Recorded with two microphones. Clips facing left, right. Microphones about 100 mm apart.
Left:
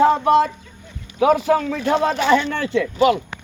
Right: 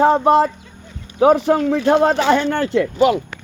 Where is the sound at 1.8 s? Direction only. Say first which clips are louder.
Right 4 dB; 65° right (ahead or behind).